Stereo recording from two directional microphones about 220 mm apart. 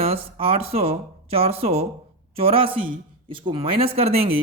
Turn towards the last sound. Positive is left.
turn(degrees=-25)  # may be behind; listen again after turning